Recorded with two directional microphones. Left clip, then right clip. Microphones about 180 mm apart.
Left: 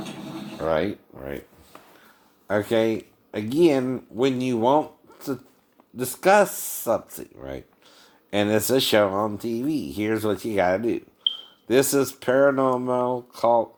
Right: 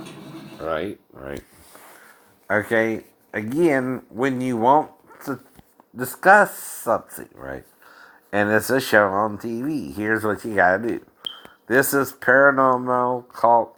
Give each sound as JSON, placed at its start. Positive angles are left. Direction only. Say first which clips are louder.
{"t": 0.6, "sound": "speech", "louder": "left 2 dB", "side_deg": 30}
{"t": 2.5, "sound": "speech", "louder": "right 2 dB", "side_deg": -10}